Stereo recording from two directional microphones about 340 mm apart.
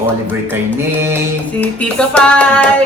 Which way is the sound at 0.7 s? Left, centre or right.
Centre.